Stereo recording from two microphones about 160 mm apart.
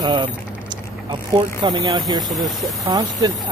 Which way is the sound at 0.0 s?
30° right (ahead or behind).